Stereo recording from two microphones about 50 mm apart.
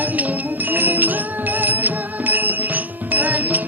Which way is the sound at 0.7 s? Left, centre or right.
Right.